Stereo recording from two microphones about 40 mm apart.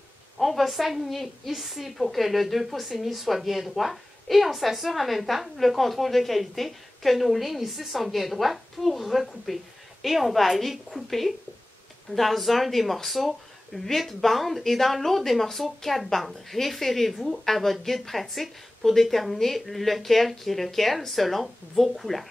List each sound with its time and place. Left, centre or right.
0.4 s speech: centre